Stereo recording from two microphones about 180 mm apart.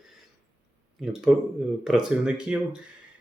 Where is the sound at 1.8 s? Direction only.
Centre (ahead or behind).